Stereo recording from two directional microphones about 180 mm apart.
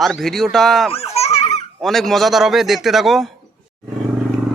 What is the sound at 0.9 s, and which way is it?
Baby laughter, 35° left (ahead or behind).